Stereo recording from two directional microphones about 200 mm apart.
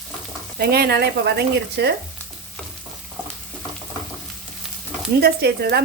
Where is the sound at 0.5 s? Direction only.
50° right (ahead or behind).